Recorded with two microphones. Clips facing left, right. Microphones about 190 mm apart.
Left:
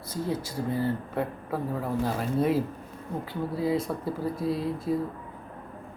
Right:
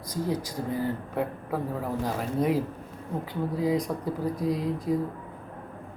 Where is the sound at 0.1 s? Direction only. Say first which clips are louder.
Right 1 dB; 15° right (ahead or behind).